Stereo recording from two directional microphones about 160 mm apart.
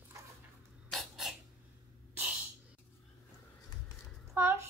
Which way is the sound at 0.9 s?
Centre (ahead or behind).